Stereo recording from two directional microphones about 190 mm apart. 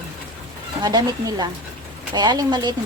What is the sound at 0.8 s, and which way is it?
Speech, 20° right (ahead or behind).